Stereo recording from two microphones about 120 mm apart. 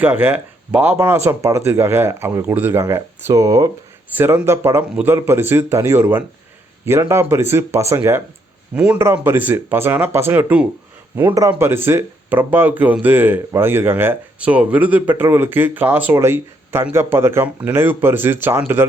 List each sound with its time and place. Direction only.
0.0 s speech: 15° right (ahead or behind)
4.1 s speech: 15° right (ahead or behind)
8.7 s speech: 10° right (ahead or behind)
9.0 s speech: 20° right (ahead or behind)